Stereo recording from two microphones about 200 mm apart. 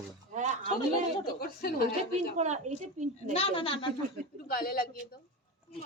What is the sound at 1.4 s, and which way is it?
Speech, 50° left (ahead or behind).